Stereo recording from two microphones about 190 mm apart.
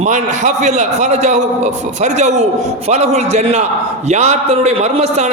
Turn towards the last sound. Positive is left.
turn(degrees=-35)  # may be behind; listen again after turning